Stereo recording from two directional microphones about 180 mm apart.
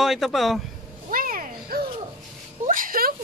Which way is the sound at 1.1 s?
50° right (ahead or behind).